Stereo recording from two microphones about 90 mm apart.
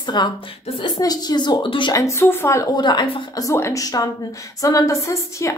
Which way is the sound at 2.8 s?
55° left (ahead or behind).